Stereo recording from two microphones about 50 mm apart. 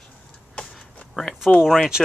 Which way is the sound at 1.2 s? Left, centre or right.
Centre.